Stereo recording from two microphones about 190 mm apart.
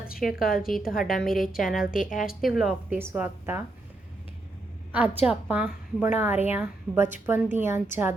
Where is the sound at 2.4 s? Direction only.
Centre (ahead or behind).